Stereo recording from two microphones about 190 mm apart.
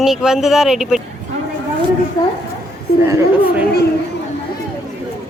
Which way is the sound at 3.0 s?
15° right (ahead or behind).